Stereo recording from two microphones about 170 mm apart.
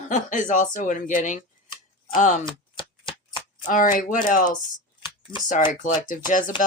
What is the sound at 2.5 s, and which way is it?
Shuffling cards, 30° left (ahead or behind).